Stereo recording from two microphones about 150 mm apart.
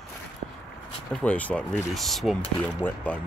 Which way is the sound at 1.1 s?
10° left (ahead or behind).